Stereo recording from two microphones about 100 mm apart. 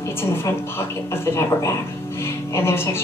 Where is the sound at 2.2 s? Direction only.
25° left (ahead or behind).